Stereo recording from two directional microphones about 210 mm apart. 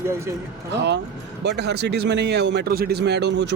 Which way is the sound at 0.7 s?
55° right (ahead or behind).